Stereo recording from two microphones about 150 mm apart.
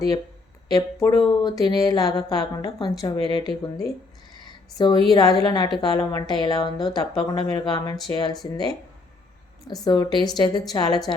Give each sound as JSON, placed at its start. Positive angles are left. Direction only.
{"t": 0.7, "sound": "speech", "side_deg": 20}
{"t": 4.4, "sound": "a sound", "side_deg": 30}
{"t": 5.0, "sound": "speech", "side_deg": 25}
{"t": 9.8, "sound": "speech", "side_deg": 25}